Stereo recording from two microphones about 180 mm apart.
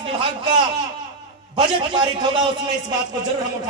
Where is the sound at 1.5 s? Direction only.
25° right (ahead or behind).